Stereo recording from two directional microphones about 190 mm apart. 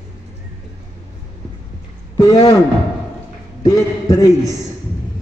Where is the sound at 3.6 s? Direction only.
15° left (ahead or behind).